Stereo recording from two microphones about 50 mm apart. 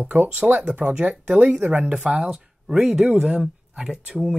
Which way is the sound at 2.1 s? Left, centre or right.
Centre.